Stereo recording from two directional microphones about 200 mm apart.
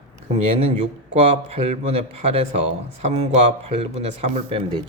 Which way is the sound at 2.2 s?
30° right (ahead or behind).